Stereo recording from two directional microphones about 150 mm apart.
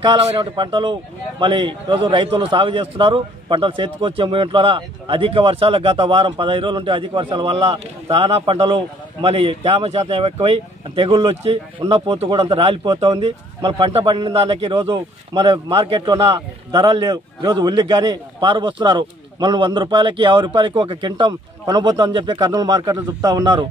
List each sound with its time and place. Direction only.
0.0 s a man's voice: 35° right (ahead or behind)
15.3 s a man's voice: 30° right (ahead or behind)